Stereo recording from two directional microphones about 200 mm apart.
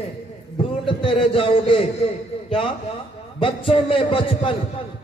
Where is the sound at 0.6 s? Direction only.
25° left (ahead or behind).